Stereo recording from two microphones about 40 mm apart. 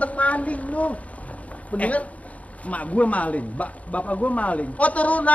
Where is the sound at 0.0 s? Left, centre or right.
Left.